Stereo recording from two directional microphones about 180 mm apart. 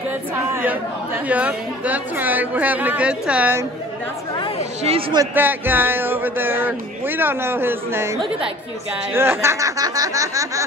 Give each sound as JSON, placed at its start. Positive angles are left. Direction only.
{"t": 0.5, "sound": "chatter", "side_deg": -10}
{"t": 1.3, "sound": "a woman's voice", "side_deg": -10}
{"t": 4.8, "sound": "a man's voice", "side_deg": -30}
{"t": 5.2, "sound": "a woman's voice", "side_deg": -10}
{"t": 9.1, "sound": "a woman's voice", "side_deg": -15}